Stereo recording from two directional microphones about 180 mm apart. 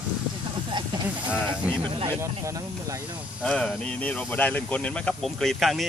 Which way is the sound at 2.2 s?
15° right (ahead or behind).